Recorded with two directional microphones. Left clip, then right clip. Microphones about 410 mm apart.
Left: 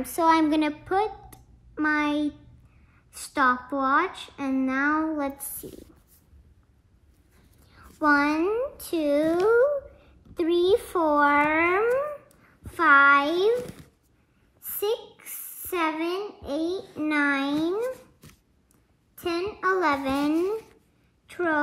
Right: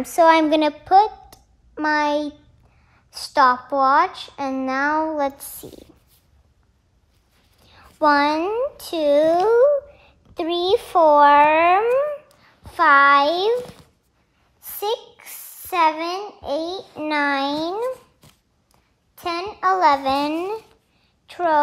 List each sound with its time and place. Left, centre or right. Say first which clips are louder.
0.0 s a woman's voice: right 7 dB; right
7.7 s a woman's voice: right 5 dB; right
12.6 s a woman's voice: right 4 dB; centre
14.6 s a child's voice: right 3 dB; centre
19.1 s a woman's voice: right 3 dB; centre
21.3 s a sound: right 7 dB; centre